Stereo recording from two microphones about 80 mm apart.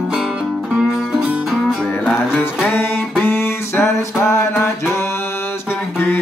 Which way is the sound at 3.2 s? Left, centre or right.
Left.